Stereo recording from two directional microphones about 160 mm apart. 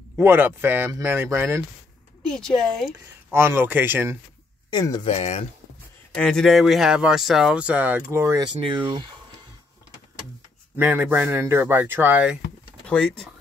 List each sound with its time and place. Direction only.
0.2 s speech: 15° right (ahead or behind)
2.2 s speech: 5° left (ahead or behind)
3.3 s speech: 15° right (ahead or behind)
4.6 s speech: 25° left (ahead or behind)
5.0 s speech: 40° left (ahead or behind)
6.1 s speech: 5° left (ahead or behind); by 9.0 s 25° right (ahead or behind)
10.8 s speech: 15° right (ahead or behind)
12.8 s speech: 5° left (ahead or behind)